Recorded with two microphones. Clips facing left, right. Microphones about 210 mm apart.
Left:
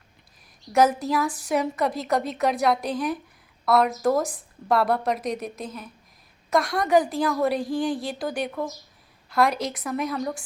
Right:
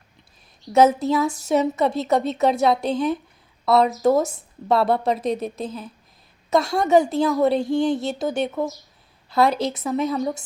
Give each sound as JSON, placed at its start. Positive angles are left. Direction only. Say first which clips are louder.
{"t": 0.7, "sound": "a woman's voice", "louder": "right 4 dB", "side_deg": -25}